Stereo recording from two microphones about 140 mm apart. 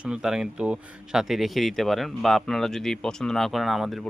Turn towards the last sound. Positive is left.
turn(degrees=0)  # may be behind; listen again after turning